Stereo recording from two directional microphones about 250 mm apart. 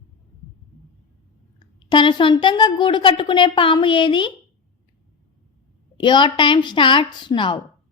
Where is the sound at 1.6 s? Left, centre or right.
Centre.